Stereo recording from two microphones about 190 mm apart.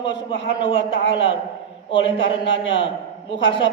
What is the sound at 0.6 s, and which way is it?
A man's voice, 25° left (ahead or behind).